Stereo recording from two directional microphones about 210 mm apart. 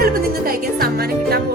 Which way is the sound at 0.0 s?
45° right (ahead or behind).